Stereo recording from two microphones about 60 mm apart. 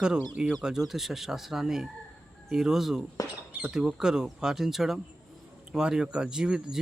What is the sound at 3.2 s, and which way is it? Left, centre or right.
Rodents, left.